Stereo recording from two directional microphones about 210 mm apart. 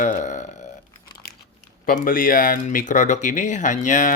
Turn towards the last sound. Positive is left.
turn(degrees=35)  # may be behind; listen again after turning